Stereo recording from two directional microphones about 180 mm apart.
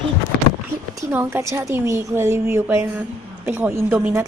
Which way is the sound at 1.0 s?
15° right (ahead or behind).